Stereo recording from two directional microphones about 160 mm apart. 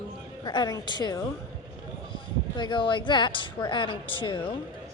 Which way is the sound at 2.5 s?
30° left (ahead or behind).